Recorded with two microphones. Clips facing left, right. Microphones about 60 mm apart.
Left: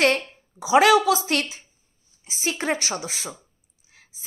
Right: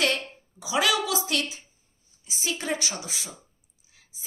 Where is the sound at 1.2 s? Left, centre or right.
Left.